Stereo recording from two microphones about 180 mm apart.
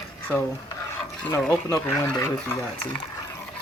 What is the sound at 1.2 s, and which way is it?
Speech, 5° left (ahead or behind).